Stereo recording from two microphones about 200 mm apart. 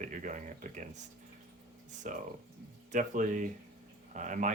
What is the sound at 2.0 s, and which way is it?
Speech, 40° right (ahead or behind).